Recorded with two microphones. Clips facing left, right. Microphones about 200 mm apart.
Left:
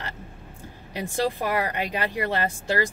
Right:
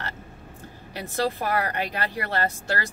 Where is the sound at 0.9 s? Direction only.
15° left (ahead or behind).